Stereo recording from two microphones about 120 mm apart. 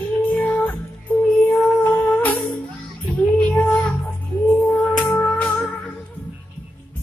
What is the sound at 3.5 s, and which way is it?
Music, 10° left (ahead or behind).